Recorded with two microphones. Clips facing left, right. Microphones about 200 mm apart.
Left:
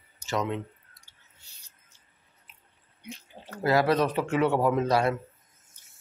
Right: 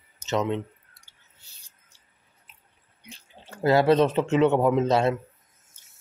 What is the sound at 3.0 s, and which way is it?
Speech, 30° right (ahead or behind).